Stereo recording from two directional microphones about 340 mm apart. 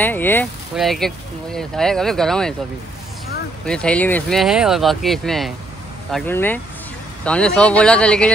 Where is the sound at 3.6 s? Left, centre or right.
Centre.